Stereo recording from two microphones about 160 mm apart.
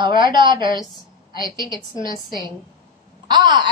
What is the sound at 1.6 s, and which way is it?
Speech, 20° left (ahead or behind).